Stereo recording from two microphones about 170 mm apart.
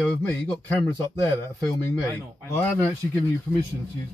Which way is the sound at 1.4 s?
15° left (ahead or behind).